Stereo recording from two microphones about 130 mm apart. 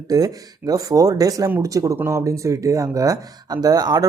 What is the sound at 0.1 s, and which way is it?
Speech, 30° right (ahead or behind).